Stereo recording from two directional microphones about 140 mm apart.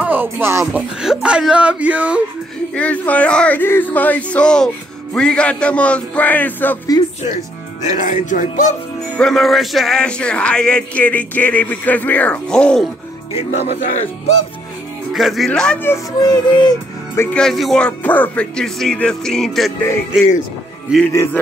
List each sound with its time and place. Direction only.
0.0 s music: 15° right (ahead or behind)
1.0 s speech: 5° right (ahead or behind)
2.7 s music: 10° left (ahead or behind)
7.8 s speech: 60° left (ahead or behind)
9.1 s music: 5° left (ahead or behind)
13.3 s music: 55° left (ahead or behind)
15.1 s speech: centre (ahead or behind)
16.2 s music: 30° left (ahead or behind)
17.2 s speech: 5° left (ahead or behind)
21.1 s music: 15° left (ahead or behind)